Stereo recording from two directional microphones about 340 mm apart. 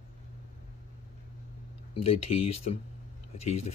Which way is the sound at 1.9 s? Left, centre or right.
Left.